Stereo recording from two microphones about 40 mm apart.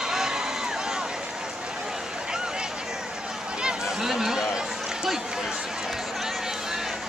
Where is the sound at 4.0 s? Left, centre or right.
Centre.